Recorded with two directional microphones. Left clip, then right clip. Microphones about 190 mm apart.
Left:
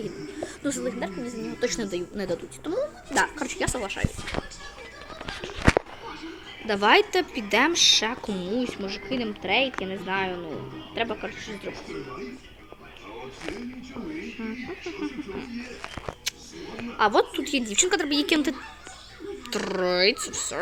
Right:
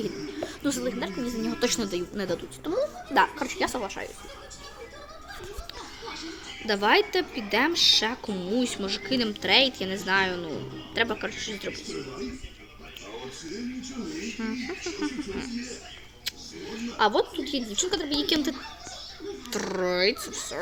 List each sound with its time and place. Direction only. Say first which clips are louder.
0.3 s speech: left 1 dB; centre (ahead or behind)
1.5 s a woman's voice: right 1 dB; 20° right (ahead or behind)
1.8 s a woman's voice: even; 5° right (ahead or behind)
6.7 s a woman's voice: left 3 dB; 5° left (ahead or behind)
14.4 s a woman's voice: right 2 dB; 5° right (ahead or behind)
19.5 s a woman's voice: left 2 dB; centre (ahead or behind)